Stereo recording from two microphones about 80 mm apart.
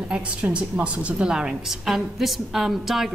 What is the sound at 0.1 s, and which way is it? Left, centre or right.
A woman's voice, centre.